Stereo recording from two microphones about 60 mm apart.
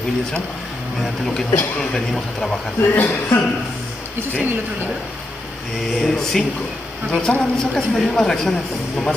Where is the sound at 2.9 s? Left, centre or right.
Left.